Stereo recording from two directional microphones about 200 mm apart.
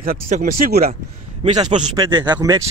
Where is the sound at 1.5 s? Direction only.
20° right (ahead or behind).